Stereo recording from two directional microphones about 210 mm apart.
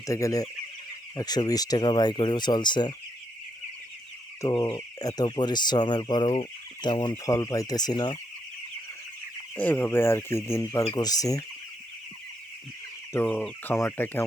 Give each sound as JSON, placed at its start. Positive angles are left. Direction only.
{"t": 0.0, "sound": "speech", "side_deg": 15}
{"t": 4.4, "sound": "speech", "side_deg": 15}
{"t": 9.6, "sound": "speech", "side_deg": 10}
{"t": 13.1, "sound": "speech", "side_deg": 5}